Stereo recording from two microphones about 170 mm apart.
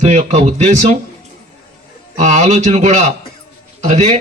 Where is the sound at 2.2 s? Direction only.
40° right (ahead or behind).